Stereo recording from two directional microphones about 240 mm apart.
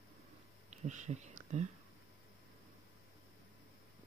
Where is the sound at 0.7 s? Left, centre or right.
Right.